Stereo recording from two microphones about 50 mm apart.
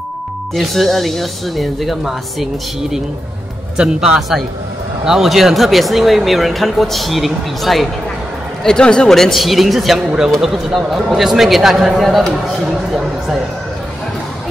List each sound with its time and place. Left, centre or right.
0.6 s speech: centre
3.7 s speech: centre
8.6 s speech: centre
9.1 s speech: centre
9.9 s speech: centre